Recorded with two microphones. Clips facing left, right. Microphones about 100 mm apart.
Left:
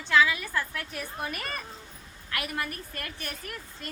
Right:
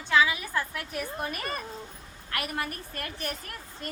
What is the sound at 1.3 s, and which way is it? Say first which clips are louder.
Speech: right 2 dB; 35° right (ahead or behind).